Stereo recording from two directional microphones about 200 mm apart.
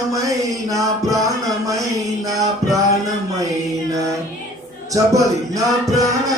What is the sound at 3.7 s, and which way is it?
Mantra, 15° right (ahead or behind).